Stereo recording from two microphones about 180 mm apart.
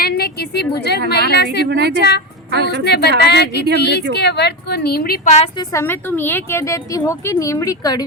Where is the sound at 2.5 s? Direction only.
65° right (ahead or behind).